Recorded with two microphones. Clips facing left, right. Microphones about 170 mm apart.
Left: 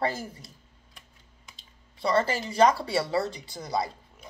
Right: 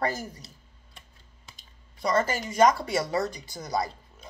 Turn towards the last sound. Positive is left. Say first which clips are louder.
# even
turn(degrees=30)  # may be behind; listen again after turning